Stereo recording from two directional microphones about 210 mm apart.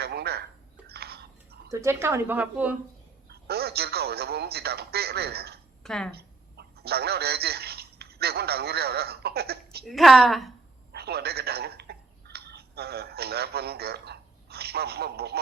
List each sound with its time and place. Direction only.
0.0 s telephone: 50° right (ahead or behind)
0.9 s whispering: 50° right (ahead or behind)
1.7 s a woman's voice: 15° right (ahead or behind)
3.2 s speech: 50° right (ahead or behind)
5.8 s a woman's voice: centre (ahead or behind)
6.1 s a sound: 50° right (ahead or behind)
9.8 s a woman's voice: centre (ahead or behind)
10.9 s telephone: 50° right (ahead or behind)